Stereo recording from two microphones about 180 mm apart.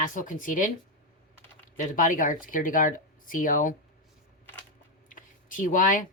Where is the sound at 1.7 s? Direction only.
45° left (ahead or behind).